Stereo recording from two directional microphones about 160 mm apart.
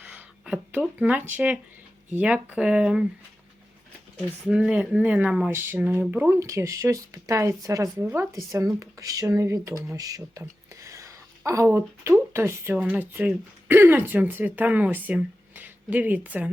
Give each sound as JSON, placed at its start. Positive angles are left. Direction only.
{"t": 0.0, "sound": "a sound", "side_deg": -10}
{"t": 2.1, "sound": "speech", "side_deg": -10}
{"t": 4.4, "sound": "a woman's voice", "side_deg": -5}